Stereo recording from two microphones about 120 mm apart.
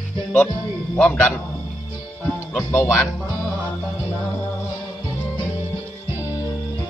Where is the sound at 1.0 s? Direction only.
15° left (ahead or behind).